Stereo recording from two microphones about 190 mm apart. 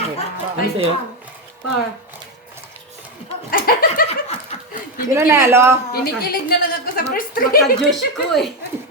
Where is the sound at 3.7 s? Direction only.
50° left (ahead or behind).